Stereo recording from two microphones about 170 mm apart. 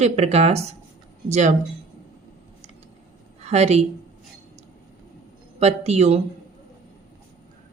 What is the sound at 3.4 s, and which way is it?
Speech, 40° right (ahead or behind).